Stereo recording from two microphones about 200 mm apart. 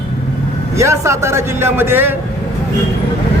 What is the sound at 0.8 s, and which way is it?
A man's voice, 15° right (ahead or behind).